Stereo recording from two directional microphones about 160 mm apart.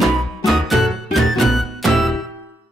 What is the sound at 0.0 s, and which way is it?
Music, centre (ahead or behind).